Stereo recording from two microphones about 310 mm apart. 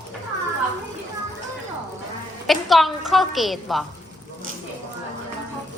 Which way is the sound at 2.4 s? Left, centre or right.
Centre.